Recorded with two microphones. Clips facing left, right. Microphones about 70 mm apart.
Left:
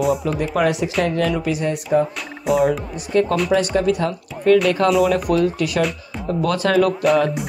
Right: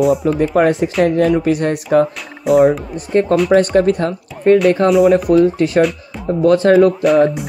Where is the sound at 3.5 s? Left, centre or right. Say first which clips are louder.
Right 6 dB; right.